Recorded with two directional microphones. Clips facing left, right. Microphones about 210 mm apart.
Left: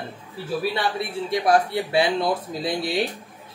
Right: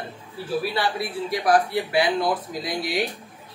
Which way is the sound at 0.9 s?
25° left (ahead or behind).